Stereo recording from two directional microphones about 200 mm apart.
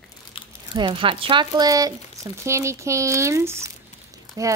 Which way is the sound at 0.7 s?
25° right (ahead or behind).